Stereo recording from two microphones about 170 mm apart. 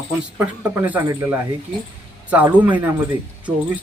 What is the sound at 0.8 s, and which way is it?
Speech, 10° right (ahead or behind).